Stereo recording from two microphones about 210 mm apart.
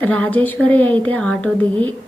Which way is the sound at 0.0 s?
5° left (ahead or behind).